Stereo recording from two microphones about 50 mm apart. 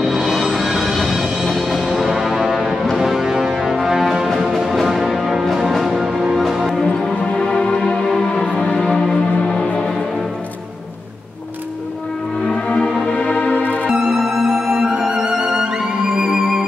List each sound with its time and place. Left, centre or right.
0.0 s music: centre
7.1 s music: centre
12.4 s music: centre
13.8 s music: centre